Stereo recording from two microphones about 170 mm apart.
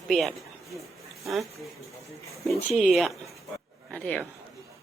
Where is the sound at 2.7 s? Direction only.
Centre (ahead or behind).